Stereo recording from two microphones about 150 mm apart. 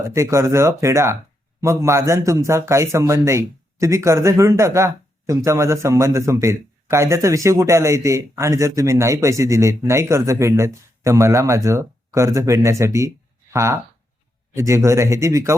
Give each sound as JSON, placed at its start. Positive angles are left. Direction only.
{"t": 0.0, "sound": "speech", "side_deg": -20}